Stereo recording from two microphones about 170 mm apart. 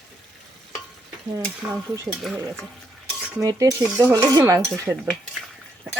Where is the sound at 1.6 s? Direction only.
15° right (ahead or behind).